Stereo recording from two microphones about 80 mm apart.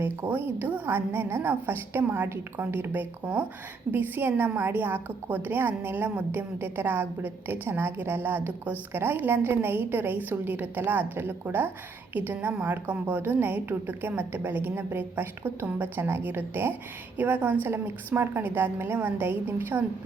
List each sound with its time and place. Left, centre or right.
0.3 s a woman's voice: right